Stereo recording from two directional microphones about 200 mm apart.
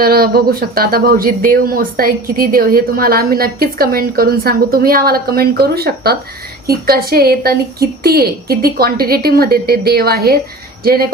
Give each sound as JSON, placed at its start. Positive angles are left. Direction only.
{"t": 0.0, "sound": "speech", "side_deg": -50}